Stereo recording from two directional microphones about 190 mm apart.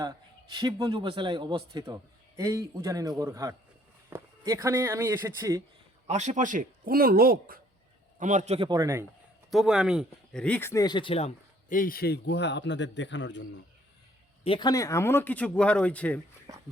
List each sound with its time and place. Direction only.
0.0 s a man's voice: 25° right (ahead or behind)
6.1 s a man's voice: 40° right (ahead or behind)
8.2 s a man's voice: 40° right (ahead or behind); by 9.0 s 15° right (ahead or behind)
9.5 s speech: centre (ahead or behind); by 11.3 s 30° left (ahead or behind)
11.7 s a man's voice: 50° left (ahead or behind); by 13.6 s 70° left (ahead or behind)
14.4 s speech: 25° left (ahead or behind); by 16.2 s 5° left (ahead or behind)
16.5 s a man's voice: 20° right (ahead or behind)